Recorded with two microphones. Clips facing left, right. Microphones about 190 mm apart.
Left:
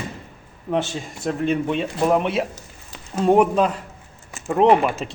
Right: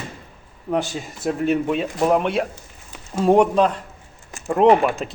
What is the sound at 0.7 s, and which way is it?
Speech, centre (ahead or behind).